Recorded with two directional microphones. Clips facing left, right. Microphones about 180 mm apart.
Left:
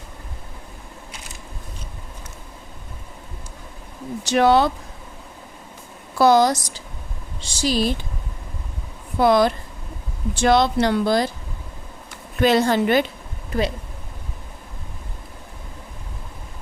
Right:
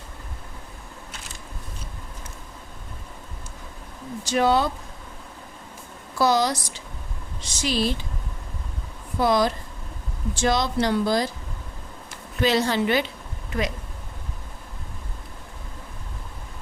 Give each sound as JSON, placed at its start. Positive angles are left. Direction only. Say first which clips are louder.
{"t": 4.2, "sound": "speech", "louder": "left 4 dB", "side_deg": 70}
{"t": 6.1, "sound": "a woman's voice", "louder": "left 6 dB", "side_deg": 55}
{"t": 7.4, "sound": "speech", "louder": "left 3 dB", "side_deg": 35}
{"t": 9.2, "sound": "speech", "louder": "left 5 dB", "side_deg": 60}
{"t": 12.4, "sound": "a woman's voice", "louder": "left 4 dB", "side_deg": 55}
{"t": 13.5, "sound": "speech", "louder": "left 4 dB", "side_deg": 30}